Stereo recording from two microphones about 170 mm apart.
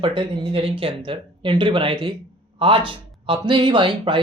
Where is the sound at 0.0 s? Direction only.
30° right (ahead or behind).